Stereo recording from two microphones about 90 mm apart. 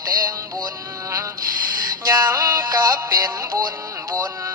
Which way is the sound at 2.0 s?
40° right (ahead or behind).